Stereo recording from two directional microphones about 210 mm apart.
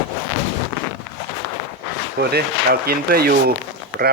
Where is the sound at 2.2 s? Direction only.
50° right (ahead or behind).